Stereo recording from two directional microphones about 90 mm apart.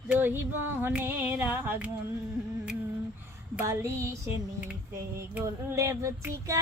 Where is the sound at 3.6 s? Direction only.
30° right (ahead or behind).